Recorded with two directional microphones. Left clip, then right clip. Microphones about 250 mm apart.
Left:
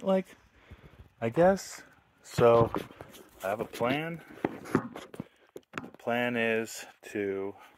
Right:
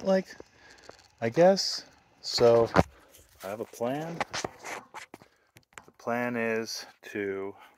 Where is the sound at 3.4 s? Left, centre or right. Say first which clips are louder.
Left 3 dB; centre.